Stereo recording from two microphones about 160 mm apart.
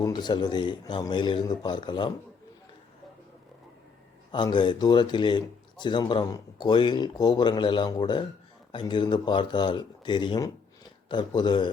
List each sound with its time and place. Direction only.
0.0 s speech: 25° left (ahead or behind)
4.3 s speech: 30° left (ahead or behind)